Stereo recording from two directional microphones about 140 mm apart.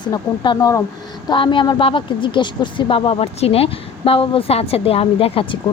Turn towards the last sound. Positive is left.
turn(degrees=40)  # may be behind; listen again after turning